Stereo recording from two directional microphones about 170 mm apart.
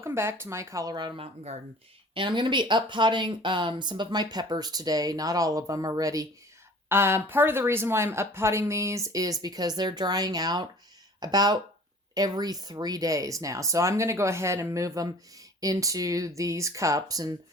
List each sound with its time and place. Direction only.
0.0 s speech: 15° right (ahead or behind)